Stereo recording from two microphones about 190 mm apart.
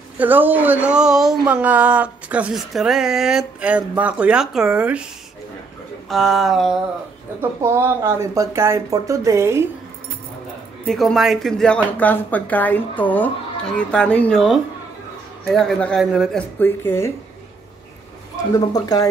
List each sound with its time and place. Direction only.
0.2 s speech: 10° right (ahead or behind)
6.0 s speech: centre (ahead or behind)
7.6 s speech: 15° right (ahead or behind)
10.9 s speech: centre (ahead or behind)
16.5 s speech: 10° left (ahead or behind)
18.5 s speech: 20° left (ahead or behind)